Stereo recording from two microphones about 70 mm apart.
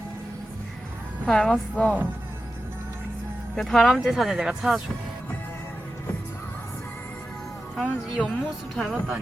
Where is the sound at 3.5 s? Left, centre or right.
Centre.